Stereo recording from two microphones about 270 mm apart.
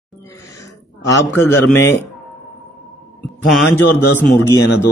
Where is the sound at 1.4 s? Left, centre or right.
Centre.